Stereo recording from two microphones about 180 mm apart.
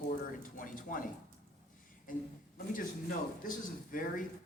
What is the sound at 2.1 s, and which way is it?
A man's voice, 50° left (ahead or behind).